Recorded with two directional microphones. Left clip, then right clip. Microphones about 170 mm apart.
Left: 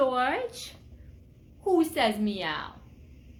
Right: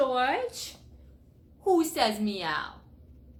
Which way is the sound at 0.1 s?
15° left (ahead or behind).